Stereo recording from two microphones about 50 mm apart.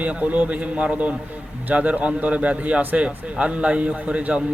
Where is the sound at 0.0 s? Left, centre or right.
Right.